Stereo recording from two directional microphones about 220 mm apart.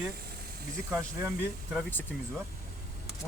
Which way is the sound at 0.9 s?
15° right (ahead or behind).